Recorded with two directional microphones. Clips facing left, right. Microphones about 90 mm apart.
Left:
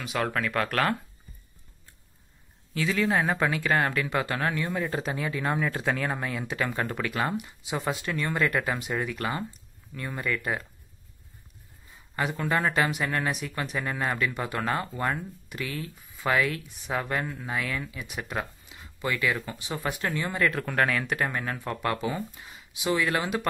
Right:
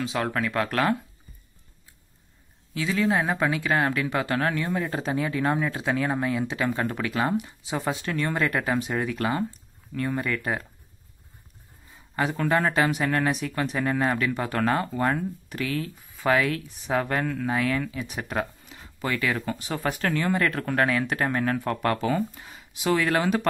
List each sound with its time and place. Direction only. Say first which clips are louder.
0.0 s speech: right 2 dB; 25° right (ahead or behind)
2.7 s speech: right 1 dB; 25° right (ahead or behind)
12.4 s speech: right 3 dB; 30° right (ahead or behind)
16.8 s speech: right 4 dB; 35° right (ahead or behind)
19.6 s speech: right 3 dB; 45° right (ahead or behind)
20.7 s speech: right 2 dB; 25° right (ahead or behind)